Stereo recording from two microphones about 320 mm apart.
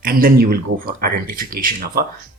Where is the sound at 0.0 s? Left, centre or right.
Right.